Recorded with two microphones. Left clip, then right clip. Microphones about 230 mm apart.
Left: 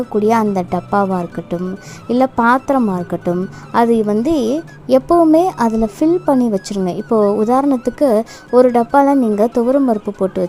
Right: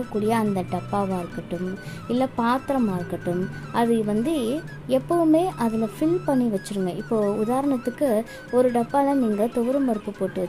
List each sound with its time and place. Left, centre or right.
0.1 s speech: left